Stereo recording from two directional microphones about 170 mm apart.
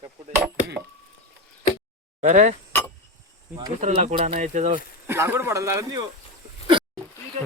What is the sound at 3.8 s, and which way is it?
Speech, 45° right (ahead or behind).